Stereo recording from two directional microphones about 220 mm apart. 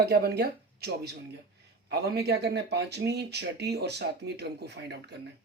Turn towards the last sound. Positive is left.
turn(degrees=-50)  # may be behind; listen again after turning